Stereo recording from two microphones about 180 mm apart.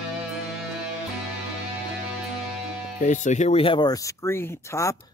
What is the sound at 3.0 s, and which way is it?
Speech, 40° left (ahead or behind).